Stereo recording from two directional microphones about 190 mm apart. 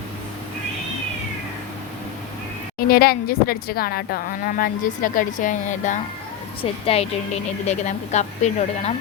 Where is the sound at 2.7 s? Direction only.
55° left (ahead or behind).